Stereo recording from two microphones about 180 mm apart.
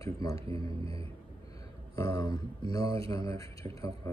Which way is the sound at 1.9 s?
20° left (ahead or behind).